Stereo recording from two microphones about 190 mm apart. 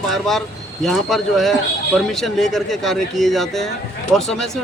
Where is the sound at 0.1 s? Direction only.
Centre (ahead or behind).